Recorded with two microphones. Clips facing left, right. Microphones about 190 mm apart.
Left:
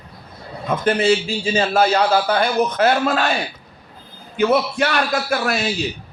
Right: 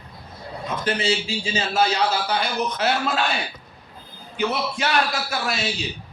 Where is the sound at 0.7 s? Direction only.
55° left (ahead or behind).